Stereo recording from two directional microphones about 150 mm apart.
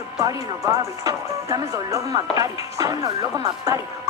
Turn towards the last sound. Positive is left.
turn(degrees=-20)  # may be behind; listen again after turning